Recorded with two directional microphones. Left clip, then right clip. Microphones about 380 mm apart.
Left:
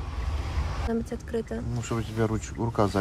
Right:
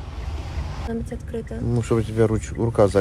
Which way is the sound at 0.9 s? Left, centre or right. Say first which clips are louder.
Even; left.